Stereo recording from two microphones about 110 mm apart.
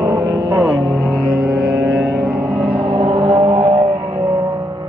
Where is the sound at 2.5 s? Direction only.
55° right (ahead or behind).